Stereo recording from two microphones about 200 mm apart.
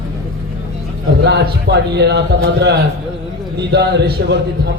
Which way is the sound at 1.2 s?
55° right (ahead or behind).